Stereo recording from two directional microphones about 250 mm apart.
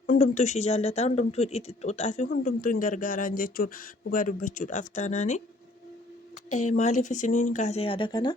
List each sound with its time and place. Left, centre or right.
0.1 s speech: left
6.5 s speech: left